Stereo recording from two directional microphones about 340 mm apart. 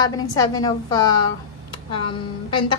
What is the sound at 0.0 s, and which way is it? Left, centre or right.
A woman's voice, centre.